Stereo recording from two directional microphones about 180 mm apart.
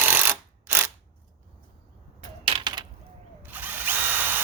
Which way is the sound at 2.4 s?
25° right (ahead or behind).